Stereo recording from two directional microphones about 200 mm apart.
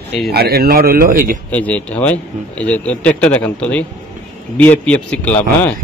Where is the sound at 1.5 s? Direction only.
5° left (ahead or behind).